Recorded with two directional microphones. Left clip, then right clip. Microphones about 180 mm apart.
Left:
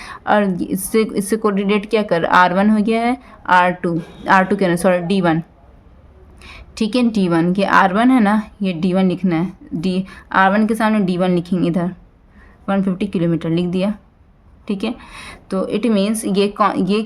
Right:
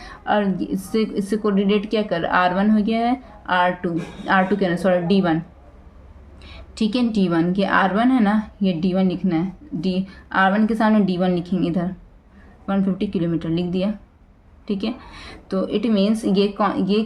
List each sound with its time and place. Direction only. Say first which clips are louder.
0.0 s a woman's voice: left 5 dB; 50° left (ahead or behind)
6.4 s a woman's voice: left 2 dB; 35° left (ahead or behind)